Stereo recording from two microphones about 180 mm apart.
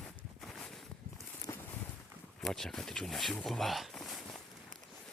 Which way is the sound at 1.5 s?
15° left (ahead or behind).